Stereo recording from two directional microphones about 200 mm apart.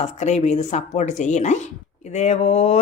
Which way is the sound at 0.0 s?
35° left (ahead or behind).